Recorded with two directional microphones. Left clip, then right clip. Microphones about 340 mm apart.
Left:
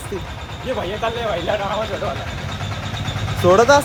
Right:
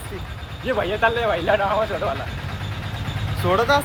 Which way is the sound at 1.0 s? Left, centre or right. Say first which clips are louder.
Right 2 dB; right.